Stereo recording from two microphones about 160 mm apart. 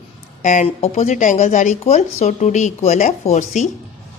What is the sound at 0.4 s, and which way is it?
Speech, 50° left (ahead or behind).